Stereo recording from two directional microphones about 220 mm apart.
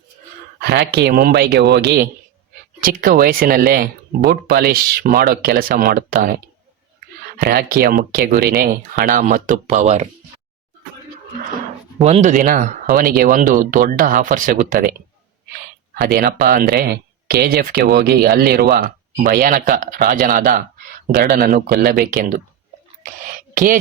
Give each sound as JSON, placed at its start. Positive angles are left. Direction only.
{"t": 0.6, "sound": "speech", "side_deg": -45}
{"t": 11.9, "sound": "speech", "side_deg": -30}
{"t": 16.1, "sound": "speech", "side_deg": -40}
{"t": 23.2, "sound": "a sound", "side_deg": -40}